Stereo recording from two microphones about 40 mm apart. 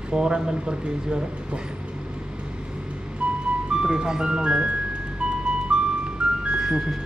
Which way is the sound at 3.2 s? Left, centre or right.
Right.